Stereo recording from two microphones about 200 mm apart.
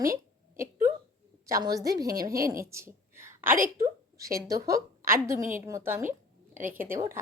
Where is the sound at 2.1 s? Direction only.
45° right (ahead or behind).